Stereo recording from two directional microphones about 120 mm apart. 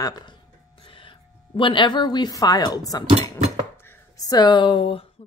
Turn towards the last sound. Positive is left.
turn(degrees=45)  # may be behind; listen again after turning